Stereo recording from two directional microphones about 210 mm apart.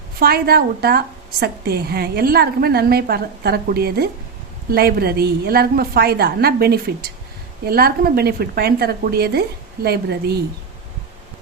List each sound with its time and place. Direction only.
0.2 s a woman's voice: 45° right (ahead or behind)